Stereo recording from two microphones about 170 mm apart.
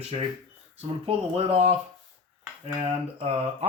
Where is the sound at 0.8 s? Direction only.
35° right (ahead or behind).